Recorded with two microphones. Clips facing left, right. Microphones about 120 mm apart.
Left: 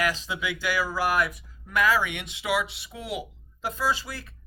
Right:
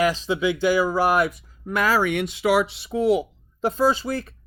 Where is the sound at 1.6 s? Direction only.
35° right (ahead or behind).